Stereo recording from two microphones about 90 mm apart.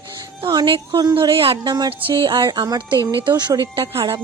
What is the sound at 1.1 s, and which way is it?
Speech, 85° right.